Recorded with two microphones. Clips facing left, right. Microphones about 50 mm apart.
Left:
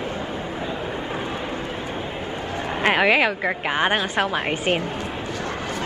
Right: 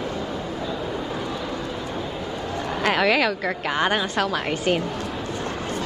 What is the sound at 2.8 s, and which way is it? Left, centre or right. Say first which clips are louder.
A woman's voice: left 2 dB; left.